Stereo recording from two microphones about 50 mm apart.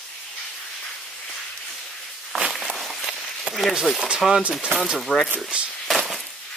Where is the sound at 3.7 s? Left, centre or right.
Centre.